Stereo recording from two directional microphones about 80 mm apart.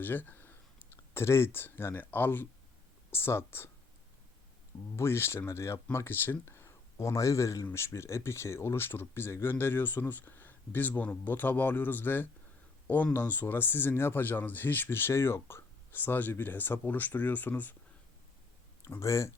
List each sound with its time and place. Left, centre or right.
0.0 s speech: left
4.9 s speech: left
18.9 s speech: left